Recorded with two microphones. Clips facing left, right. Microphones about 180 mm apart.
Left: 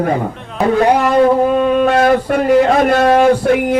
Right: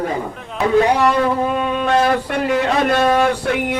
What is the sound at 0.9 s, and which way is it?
Speech, 45° left (ahead or behind).